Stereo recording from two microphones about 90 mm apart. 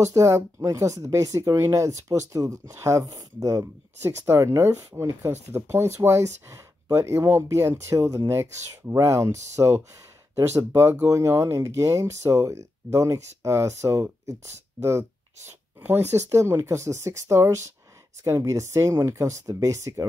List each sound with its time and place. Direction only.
0.0 s speech: 35° right (ahead or behind)